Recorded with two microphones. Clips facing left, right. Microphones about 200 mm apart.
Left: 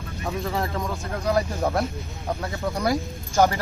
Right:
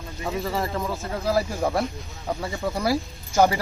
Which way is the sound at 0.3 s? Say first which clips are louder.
Right 1 dB; centre (ahead or behind).